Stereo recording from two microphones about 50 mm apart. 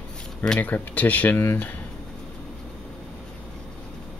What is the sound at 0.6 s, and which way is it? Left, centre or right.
Speech, left.